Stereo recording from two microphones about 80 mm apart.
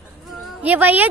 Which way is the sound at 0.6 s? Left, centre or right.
Right.